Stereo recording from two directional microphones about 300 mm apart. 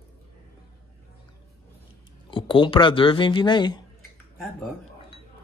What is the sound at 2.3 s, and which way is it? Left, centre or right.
Speech, centre.